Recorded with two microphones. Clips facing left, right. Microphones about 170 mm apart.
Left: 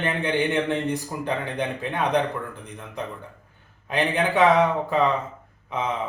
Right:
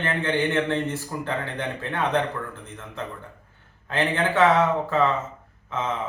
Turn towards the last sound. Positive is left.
turn(degrees=15)  # may be behind; listen again after turning